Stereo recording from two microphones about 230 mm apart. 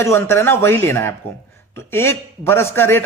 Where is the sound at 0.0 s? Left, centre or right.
Centre.